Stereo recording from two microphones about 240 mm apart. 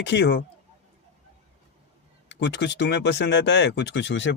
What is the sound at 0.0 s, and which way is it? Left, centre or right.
Speech, left.